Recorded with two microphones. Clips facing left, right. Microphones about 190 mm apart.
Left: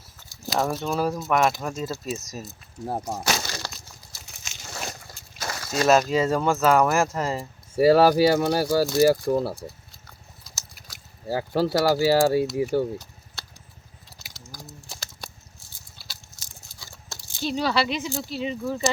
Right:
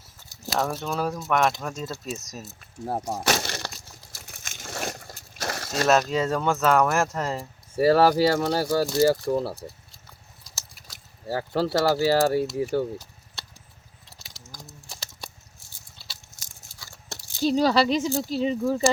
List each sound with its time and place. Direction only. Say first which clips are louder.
0.4 s speech: left 2 dB; 5° right (ahead or behind)
3.2 s breaking: right 2 dB; 55° right (ahead or behind)
4.1 s a sound: right 3 dB; 50° right (ahead or behind)
5.8 s speech: left 2 dB; centre (ahead or behind)
7.8 s speech: left 2 dB; 10° left (ahead or behind)
11.3 s speech: left 2 dB; 15° left (ahead or behind)
14.4 s typing: left 3 dB; 5° left (ahead or behind)
16.4 s a sound: left 1 dB; 45° right (ahead or behind)
17.4 s speech: right 4 dB; 40° right (ahead or behind)